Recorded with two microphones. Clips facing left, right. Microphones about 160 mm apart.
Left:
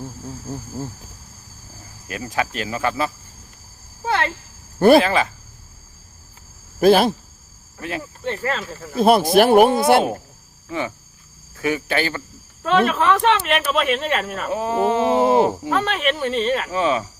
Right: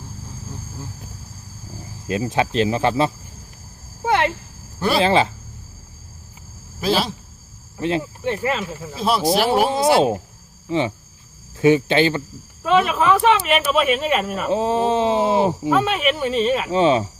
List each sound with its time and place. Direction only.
2.0 s speech: 25° right (ahead or behind)
4.0 s a sound: 20° right (ahead or behind)
4.9 s speech: 25° right (ahead or behind)
6.7 s speech: 50° left (ahead or behind)
7.8 s speech: 25° right (ahead or behind)
8.2 s speech: 10° right (ahead or behind)
9.0 s speech: 55° left (ahead or behind)
10.7 s speech: 25° right (ahead or behind)
12.6 s speech: 5° right (ahead or behind)
14.5 s speech: 20° right (ahead or behind)
15.8 s speech: 5° right (ahead or behind)
16.7 s speech: 30° right (ahead or behind)